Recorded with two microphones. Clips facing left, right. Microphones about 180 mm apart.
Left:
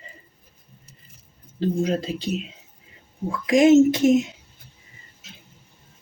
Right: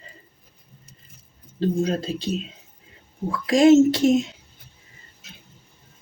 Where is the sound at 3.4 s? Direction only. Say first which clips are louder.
Even; 15° left (ahead or behind).